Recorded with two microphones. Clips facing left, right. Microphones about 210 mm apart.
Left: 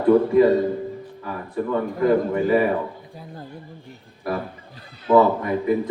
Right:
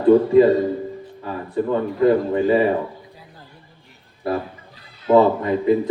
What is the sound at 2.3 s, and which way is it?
Speech, 25° right (ahead or behind).